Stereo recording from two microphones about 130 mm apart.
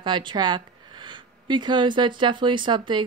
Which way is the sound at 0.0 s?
40° right (ahead or behind).